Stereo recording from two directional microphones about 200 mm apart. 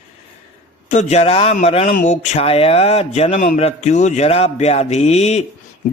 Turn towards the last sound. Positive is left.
turn(degrees=35)  # may be behind; listen again after turning